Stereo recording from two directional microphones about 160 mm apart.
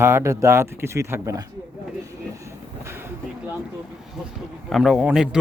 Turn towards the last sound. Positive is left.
turn(degrees=-5)  # may be behind; listen again after turning